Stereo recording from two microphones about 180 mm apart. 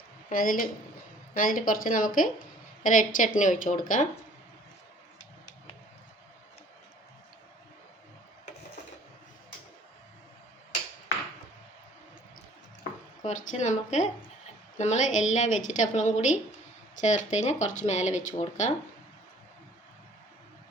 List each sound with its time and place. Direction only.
0.3 s speech: 50° left (ahead or behind)
13.2 s a woman's voice: 40° left (ahead or behind)